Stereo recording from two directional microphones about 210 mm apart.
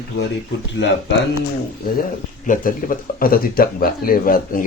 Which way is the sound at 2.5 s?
40° left (ahead or behind).